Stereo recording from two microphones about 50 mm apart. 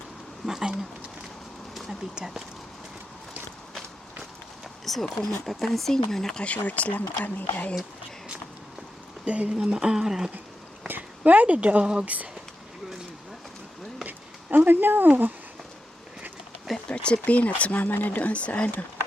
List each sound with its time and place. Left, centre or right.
0.4 s speech: centre
1.9 s speech: centre
4.9 s speech: centre
6.4 s speech: left
9.2 s speech: right
11.2 s speech: right
14.0 s a sound: right
16.9 s speech: left